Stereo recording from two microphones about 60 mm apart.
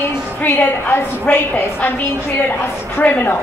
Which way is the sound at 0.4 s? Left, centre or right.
Left.